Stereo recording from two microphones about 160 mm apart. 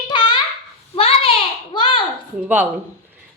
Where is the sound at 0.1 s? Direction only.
30° left (ahead or behind).